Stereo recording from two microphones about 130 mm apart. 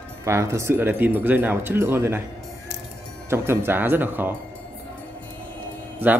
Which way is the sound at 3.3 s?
15° right (ahead or behind).